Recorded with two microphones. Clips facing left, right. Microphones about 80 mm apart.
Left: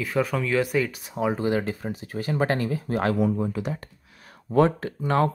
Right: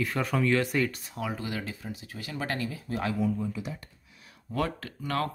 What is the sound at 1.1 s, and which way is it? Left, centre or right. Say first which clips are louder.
Speech: left 10 dB; left.